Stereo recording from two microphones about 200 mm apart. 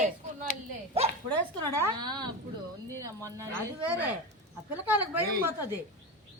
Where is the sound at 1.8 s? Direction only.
20° right (ahead or behind).